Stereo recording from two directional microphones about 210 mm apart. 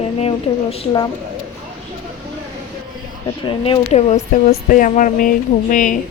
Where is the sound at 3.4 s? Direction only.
25° left (ahead or behind).